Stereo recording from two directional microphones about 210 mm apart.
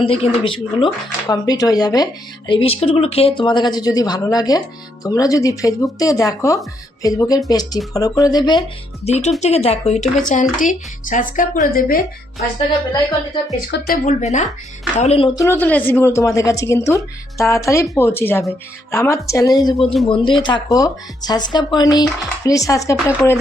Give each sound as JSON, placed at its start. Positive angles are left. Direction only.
{"t": 0.0, "sound": "a woman's voice", "side_deg": 25}
{"t": 9.0, "sound": "speech", "side_deg": 30}
{"t": 13.7, "sound": "speech", "side_deg": 50}
{"t": 15.4, "sound": "a woman's voice", "side_deg": 10}